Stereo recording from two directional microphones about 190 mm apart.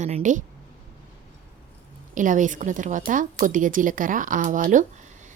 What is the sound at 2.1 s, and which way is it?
A woman's voice, 40° right (ahead or behind).